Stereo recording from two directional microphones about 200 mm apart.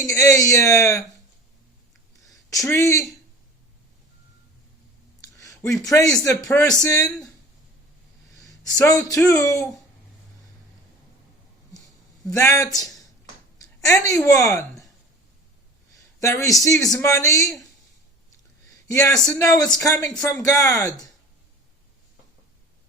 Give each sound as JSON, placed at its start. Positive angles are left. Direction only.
{"t": 0.0, "sound": "speech", "side_deg": 15}
{"t": 2.6, "sound": "speech", "side_deg": 15}
{"t": 5.4, "sound": "a sound", "side_deg": 15}
{"t": 5.9, "sound": "speech", "side_deg": 15}
{"t": 8.4, "sound": "speech", "side_deg": 15}
{"t": 12.4, "sound": "speech", "side_deg": 15}
{"t": 16.2, "sound": "speech", "side_deg": 15}
{"t": 18.9, "sound": "a man's voice", "side_deg": 15}